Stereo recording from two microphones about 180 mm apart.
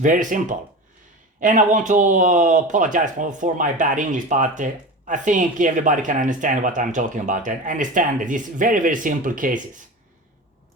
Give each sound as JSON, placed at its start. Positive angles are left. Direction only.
{"t": 0.0, "sound": "speech", "side_deg": -45}